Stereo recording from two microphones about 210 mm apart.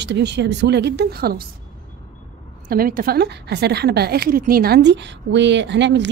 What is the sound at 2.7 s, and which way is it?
A woman's voice, 45° right (ahead or behind).